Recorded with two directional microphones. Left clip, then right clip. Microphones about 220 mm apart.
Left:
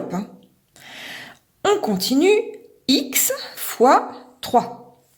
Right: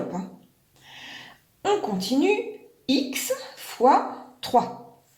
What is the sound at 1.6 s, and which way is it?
A woman's voice, 50° left (ahead or behind).